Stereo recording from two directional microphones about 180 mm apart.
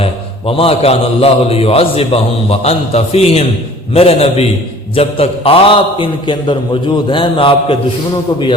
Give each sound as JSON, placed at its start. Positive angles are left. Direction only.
{"t": 0.0, "sound": "a man's voice", "side_deg": 30}